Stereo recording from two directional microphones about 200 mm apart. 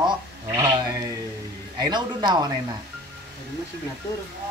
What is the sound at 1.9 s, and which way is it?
Speech, 20° right (ahead or behind).